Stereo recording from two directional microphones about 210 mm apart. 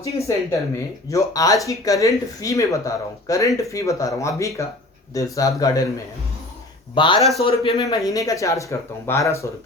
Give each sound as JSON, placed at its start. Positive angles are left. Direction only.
{"t": 0.0, "sound": "speech", "side_deg": 15}
{"t": 6.9, "sound": "a man's voice", "side_deg": 20}
{"t": 8.1, "sound": "speech", "side_deg": 15}